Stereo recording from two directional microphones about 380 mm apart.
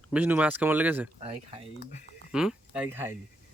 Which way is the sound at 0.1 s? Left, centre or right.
Centre.